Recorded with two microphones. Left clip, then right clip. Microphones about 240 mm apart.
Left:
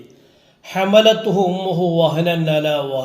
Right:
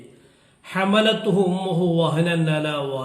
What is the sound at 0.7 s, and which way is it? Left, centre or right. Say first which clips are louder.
A man's voice: left 7 dB; centre.